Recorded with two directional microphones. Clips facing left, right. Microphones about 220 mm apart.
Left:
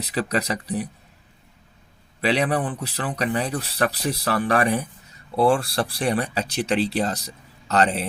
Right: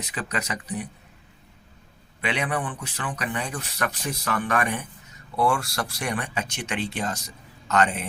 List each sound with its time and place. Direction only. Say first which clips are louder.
0.0 s speech: left 7 dB; 35° left (ahead or behind)
2.2 s speech: left 6 dB; 35° left (ahead or behind)